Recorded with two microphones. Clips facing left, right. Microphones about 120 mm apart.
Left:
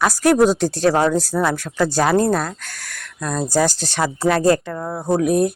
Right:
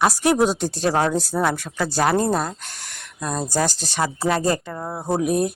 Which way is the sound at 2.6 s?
25° right (ahead or behind).